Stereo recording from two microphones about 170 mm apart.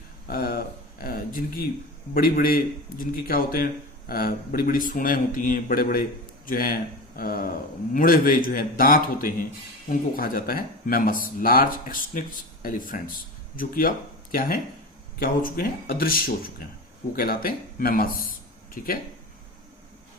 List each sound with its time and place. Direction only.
0.3 s a man's voice: 60° left (ahead or behind)